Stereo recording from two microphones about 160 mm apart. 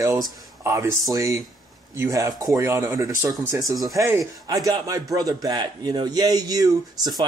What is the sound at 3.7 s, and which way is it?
Speech, centre (ahead or behind).